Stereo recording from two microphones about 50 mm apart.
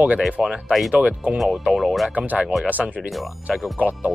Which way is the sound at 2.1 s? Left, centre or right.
Right.